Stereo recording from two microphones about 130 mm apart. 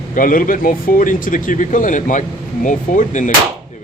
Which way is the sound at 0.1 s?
90° left.